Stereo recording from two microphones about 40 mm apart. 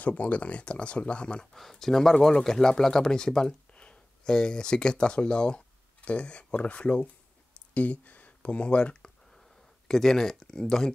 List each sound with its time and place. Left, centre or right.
0.0 s speech: left
1.4 s speech: centre; by 9.1 s left
9.8 s speech: centre